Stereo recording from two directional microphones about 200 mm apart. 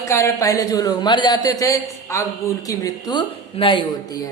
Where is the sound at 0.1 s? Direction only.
15° left (ahead or behind).